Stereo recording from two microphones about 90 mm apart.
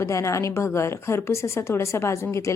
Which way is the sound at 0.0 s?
35° left (ahead or behind).